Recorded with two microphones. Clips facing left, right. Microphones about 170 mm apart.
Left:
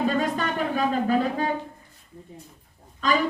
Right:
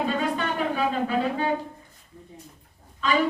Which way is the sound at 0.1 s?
45° left (ahead or behind).